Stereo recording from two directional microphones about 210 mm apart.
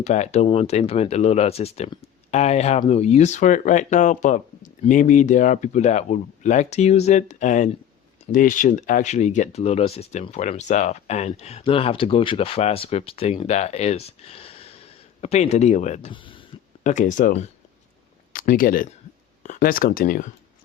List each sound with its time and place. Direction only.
0.0 s speech: 30° left (ahead or behind)
16.8 s speech: 35° left (ahead or behind)